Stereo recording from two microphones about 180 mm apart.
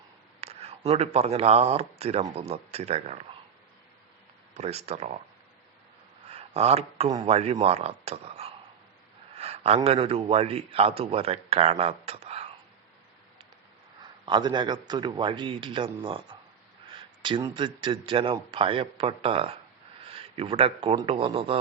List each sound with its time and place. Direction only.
0.4 s a man's voice: 35° right (ahead or behind)
4.5 s a man's voice: 35° right (ahead or behind)
6.2 s a sound: 35° right (ahead or behind)
7.3 s a man's voice: 35° right (ahead or behind)
14.0 s a man's voice: 25° right (ahead or behind)
16.9 s a sound: 30° right (ahead or behind)
17.4 s a man's voice: 25° right (ahead or behind)